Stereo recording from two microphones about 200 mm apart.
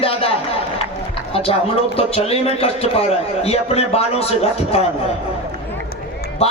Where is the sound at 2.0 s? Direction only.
30° left (ahead or behind).